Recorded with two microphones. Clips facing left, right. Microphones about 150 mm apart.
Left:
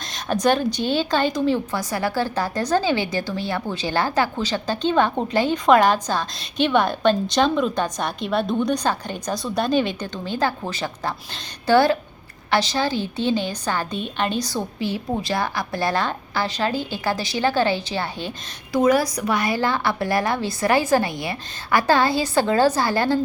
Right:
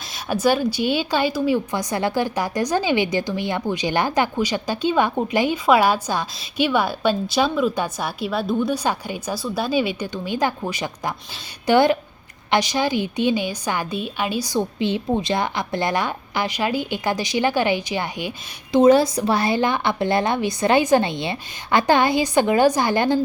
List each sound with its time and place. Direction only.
0.1 s a woman's voice: 5° right (ahead or behind)
18.8 s a woman's voice: 25° right (ahead or behind)